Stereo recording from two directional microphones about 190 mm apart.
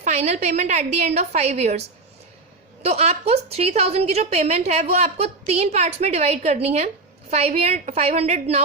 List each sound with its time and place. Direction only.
0.0 s a woman's voice: 35° right (ahead or behind)
2.8 s a woman's voice: 35° right (ahead or behind)